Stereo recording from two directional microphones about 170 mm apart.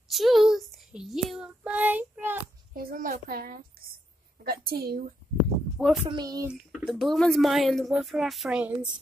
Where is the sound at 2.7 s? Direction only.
60° right (ahead or behind).